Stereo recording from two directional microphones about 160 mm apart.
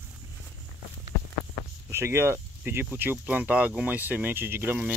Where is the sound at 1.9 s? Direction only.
15° right (ahead or behind).